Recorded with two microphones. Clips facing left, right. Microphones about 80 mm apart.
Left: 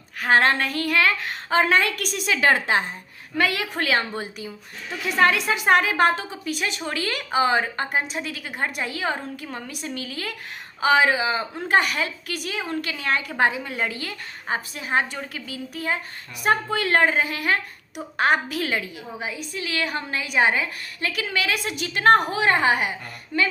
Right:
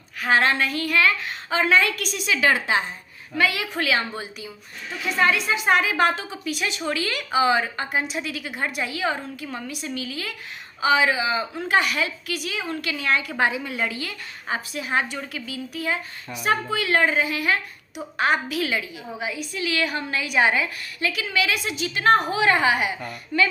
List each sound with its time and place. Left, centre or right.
0.2 s a woman's voice: left
5.2 s a woman's voice: left